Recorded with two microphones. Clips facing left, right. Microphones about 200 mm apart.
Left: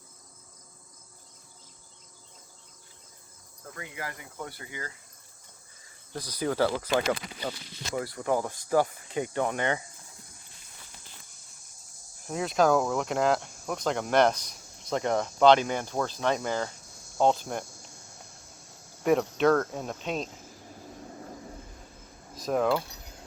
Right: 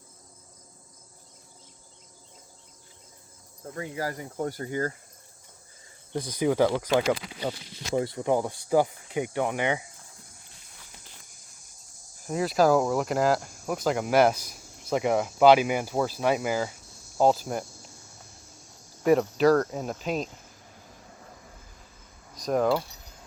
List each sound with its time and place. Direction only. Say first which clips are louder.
3.6 s speech: right 7 dB; 30° right (ahead or behind)
6.4 s speech: right 4 dB; 15° right (ahead or behind)
12.2 s speech: right 2 dB; centre (ahead or behind)
19.0 s speech: right 3 dB; centre (ahead or behind)
22.4 s speech: right 2 dB; centre (ahead or behind)